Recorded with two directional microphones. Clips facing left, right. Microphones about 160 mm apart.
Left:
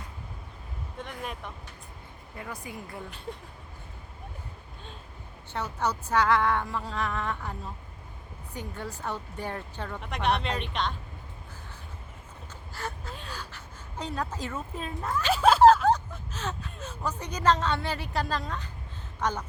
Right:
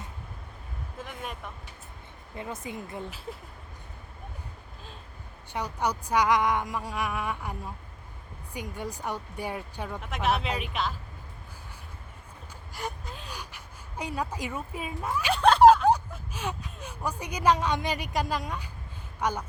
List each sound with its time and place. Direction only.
0.9 s speech: centre (ahead or behind)
2.3 s speech: 20° right (ahead or behind)
5.5 s speech: 15° right (ahead or behind)
12.7 s gasp: 15° right (ahead or behind)
13.3 s a woman's voice: 15° right (ahead or behind)
15.3 s a sound: 5° left (ahead or behind)
15.9 s speech: 10° right (ahead or behind)